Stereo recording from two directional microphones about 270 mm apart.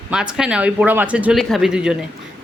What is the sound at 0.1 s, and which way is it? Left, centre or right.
Speech, centre.